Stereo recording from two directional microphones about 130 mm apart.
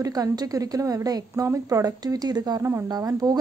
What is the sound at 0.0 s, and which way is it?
A woman's voice, 30° right (ahead or behind).